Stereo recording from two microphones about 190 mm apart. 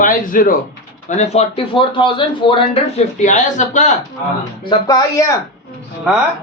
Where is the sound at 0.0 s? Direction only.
45° left (ahead or behind); by 2.6 s 25° left (ahead or behind).